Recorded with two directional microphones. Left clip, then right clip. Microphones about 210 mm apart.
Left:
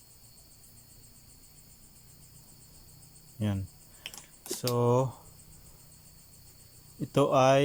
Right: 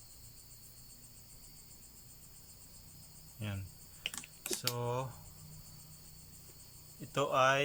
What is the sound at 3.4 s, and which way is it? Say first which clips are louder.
Speech: left 10 dB; 30° left (ahead or behind).